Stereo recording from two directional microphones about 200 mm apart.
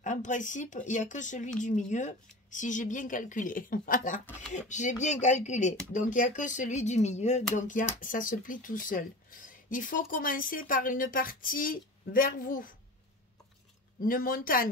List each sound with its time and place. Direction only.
0.0 s speech: 40° left (ahead or behind)
14.0 s speech: 45° left (ahead or behind)